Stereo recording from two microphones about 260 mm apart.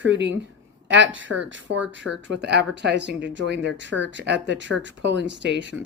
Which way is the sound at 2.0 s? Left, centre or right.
Right.